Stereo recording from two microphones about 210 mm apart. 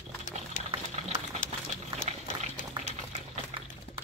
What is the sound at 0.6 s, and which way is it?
Boiling, 35° left (ahead or behind).